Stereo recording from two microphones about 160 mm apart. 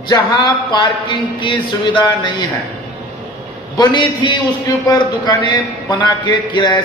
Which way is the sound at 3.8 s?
30° left (ahead or behind).